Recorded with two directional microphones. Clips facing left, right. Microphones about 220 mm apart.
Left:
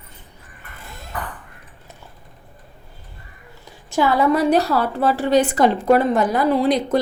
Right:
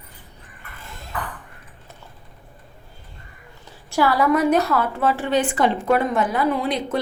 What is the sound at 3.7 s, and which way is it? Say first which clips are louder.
A woman's voice: left 1 dB; 20° left (ahead or behind).